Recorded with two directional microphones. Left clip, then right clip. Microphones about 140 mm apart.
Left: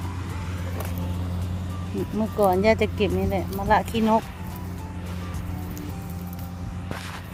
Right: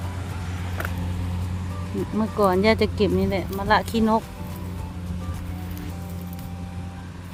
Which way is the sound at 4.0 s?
35° right (ahead or behind).